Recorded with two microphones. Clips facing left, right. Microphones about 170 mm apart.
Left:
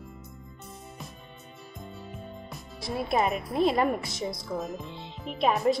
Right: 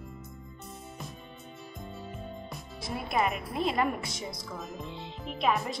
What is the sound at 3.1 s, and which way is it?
Speech, 40° left (ahead or behind).